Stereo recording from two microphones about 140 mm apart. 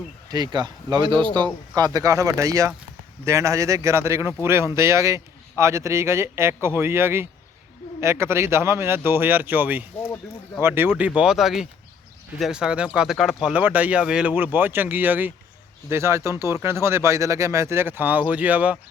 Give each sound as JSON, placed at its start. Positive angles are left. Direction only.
{"t": 0.3, "sound": "a man's voice", "side_deg": -30}
{"t": 10.0, "sound": "speech", "side_deg": 15}
{"t": 10.6, "sound": "a man's voice", "side_deg": -15}